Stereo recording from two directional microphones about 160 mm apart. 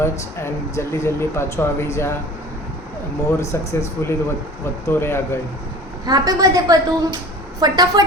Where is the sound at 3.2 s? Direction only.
20° left (ahead or behind).